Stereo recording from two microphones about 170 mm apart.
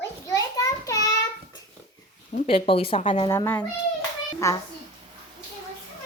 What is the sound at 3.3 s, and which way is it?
A child's voice, 15° left (ahead or behind).